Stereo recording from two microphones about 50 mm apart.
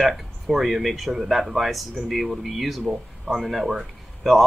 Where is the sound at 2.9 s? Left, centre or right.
Centre.